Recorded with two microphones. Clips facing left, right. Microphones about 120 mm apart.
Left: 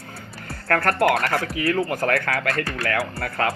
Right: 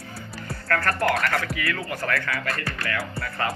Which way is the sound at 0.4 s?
55° left (ahead or behind).